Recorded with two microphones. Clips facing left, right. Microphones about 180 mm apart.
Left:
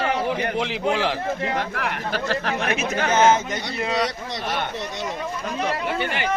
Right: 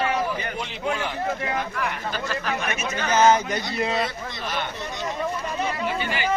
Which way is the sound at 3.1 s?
25° left (ahead or behind).